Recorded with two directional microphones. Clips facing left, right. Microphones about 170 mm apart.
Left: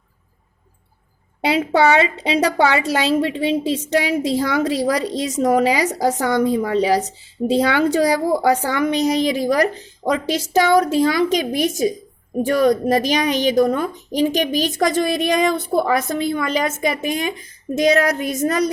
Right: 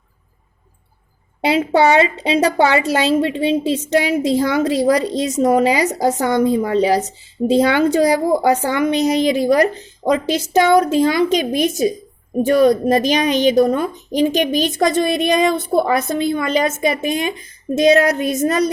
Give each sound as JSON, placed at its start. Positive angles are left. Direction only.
{"t": 1.5, "sound": "a woman's voice", "side_deg": -25}